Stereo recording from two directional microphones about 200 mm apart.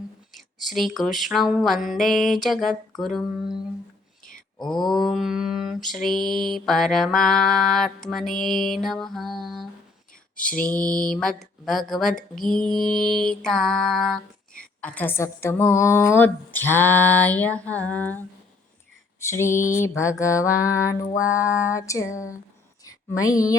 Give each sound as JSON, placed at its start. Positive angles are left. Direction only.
{"t": 0.3, "sound": "mantra", "side_deg": 0}
{"t": 4.8, "sound": "mantra", "side_deg": 0}
{"t": 10.3, "sound": "lullaby", "side_deg": 45}
{"t": 10.9, "sound": "mantra", "side_deg": 5}
{"t": 14.8, "sound": "a woman's voice", "side_deg": 5}